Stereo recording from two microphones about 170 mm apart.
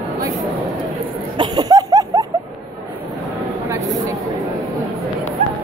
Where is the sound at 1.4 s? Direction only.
25° right (ahead or behind).